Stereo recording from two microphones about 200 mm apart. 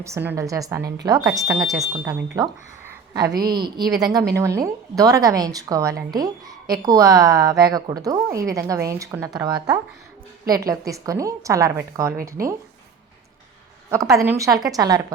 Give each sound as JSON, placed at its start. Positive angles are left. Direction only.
{"t": 0.0, "sound": "a woman's voice", "side_deg": -10}
{"t": 13.9, "sound": "a woman's voice", "side_deg": -15}